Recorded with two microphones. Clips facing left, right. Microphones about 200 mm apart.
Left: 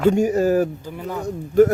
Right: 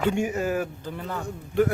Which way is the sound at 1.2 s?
40° left (ahead or behind).